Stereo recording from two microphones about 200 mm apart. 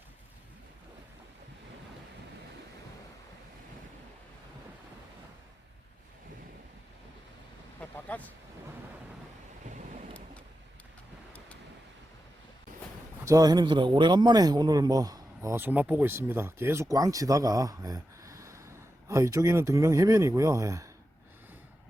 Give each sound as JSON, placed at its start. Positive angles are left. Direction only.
{"t": 7.8, "sound": "speech", "side_deg": 10}
{"t": 13.2, "sound": "speech", "side_deg": -20}